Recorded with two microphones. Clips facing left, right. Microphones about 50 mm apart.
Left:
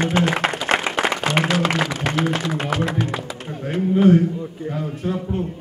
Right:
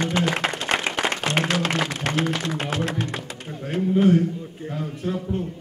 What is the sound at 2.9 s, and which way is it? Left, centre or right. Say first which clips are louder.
Speech: left 4 dB; centre.